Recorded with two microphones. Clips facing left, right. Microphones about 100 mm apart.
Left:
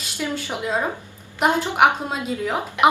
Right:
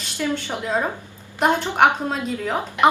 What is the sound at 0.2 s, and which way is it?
A woman's voice, 10° left (ahead or behind).